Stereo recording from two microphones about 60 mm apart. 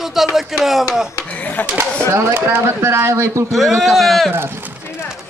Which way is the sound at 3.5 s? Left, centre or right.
Centre.